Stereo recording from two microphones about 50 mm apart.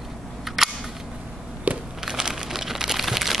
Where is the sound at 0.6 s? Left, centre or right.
Centre.